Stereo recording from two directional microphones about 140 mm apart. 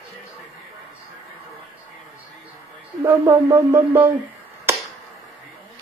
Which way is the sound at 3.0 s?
15° right (ahead or behind).